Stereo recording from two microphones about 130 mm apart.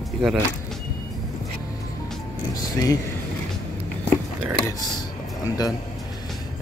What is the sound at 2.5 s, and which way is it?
Speech, 25° left (ahead or behind).